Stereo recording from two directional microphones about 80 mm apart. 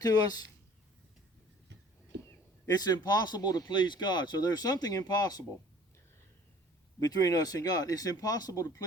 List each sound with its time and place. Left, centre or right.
0.0 s speech: left
2.6 s speech: left
7.0 s speech: left